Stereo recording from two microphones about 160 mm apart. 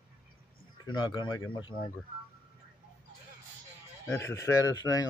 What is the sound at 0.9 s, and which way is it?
Speech, 30° left (ahead or behind).